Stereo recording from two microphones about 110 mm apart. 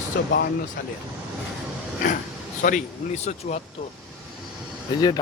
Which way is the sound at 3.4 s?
90° left.